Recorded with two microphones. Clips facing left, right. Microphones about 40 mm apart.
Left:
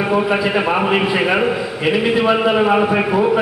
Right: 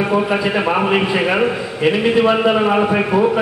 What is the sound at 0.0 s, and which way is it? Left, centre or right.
A man's voice, centre.